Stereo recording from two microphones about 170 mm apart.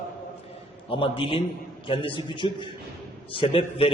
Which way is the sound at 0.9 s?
30° left (ahead or behind).